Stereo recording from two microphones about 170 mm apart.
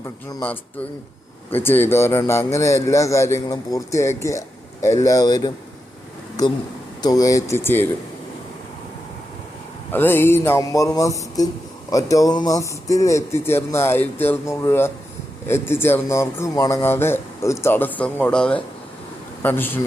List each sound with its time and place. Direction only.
0.0 s speech: 20° left (ahead or behind)
0.4 s a man's voice: 10° left (ahead or behind)
7.0 s speech: 20° left (ahead or behind)
9.9 s a man's voice: 10° left (ahead or behind)